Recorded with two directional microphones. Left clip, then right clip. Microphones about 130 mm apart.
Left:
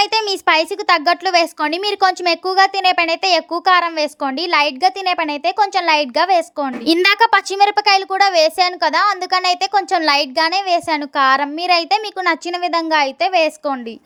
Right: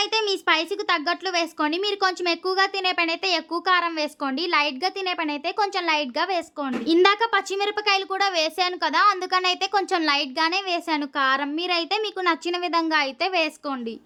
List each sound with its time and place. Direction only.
0.0 s a child's voice: 40° left (ahead or behind)
6.8 s a child's voice: 65° left (ahead or behind); by 13.7 s 30° left (ahead or behind)